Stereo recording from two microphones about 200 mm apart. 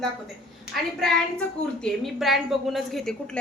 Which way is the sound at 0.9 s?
5° left (ahead or behind).